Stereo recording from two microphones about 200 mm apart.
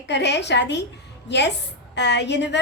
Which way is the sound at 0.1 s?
60° left (ahead or behind).